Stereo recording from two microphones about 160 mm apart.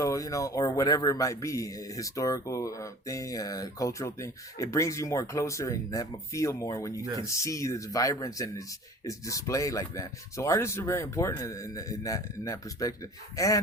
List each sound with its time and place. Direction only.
0.0 s speech: 20° left (ahead or behind)
7.0 s speech: 25° right (ahead or behind)
7.3 s speech: 20° left (ahead or behind)